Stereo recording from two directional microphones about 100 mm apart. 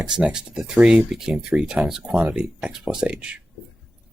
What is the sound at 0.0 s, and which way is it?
Speech, 10° right (ahead or behind).